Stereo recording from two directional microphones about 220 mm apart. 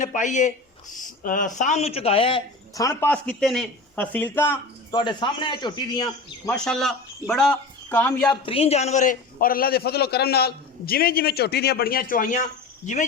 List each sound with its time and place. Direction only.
0.0 s speech: 35° left (ahead or behind); by 4.6 s 10° left (ahead or behind)
4.9 s speech: 20° left (ahead or behind)
6.7 s speech: centre (ahead or behind)
8.3 s a man's voice: 25° left (ahead or behind)